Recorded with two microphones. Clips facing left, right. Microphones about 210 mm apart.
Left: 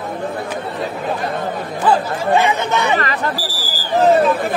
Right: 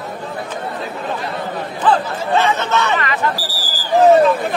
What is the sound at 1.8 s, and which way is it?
Chatter, 10° left (ahead or behind).